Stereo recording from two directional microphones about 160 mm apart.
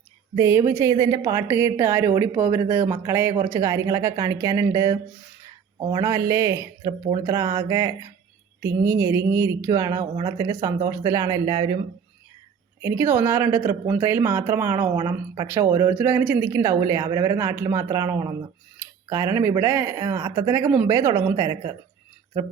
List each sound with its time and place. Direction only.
0.3 s a woman's voice: 15° right (ahead or behind)
12.8 s a woman's voice: 15° right (ahead or behind)